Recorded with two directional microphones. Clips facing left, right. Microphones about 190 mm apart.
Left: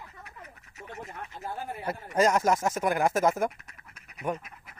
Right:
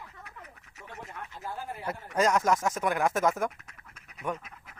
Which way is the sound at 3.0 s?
35° left (ahead or behind).